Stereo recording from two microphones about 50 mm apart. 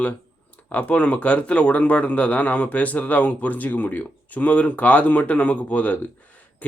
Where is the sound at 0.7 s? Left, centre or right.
Left.